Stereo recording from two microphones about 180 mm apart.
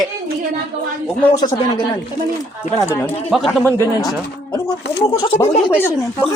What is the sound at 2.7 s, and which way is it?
Speech, 45° left (ahead or behind).